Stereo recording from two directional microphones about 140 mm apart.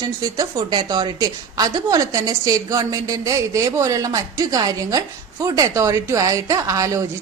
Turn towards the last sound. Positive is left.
turn(degrees=-20)  # may be behind; listen again after turning